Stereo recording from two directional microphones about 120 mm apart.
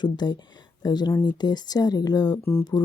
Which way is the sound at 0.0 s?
35° left (ahead or behind).